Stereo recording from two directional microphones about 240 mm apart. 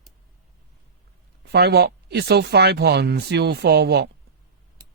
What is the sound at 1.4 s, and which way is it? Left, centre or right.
Speech, right.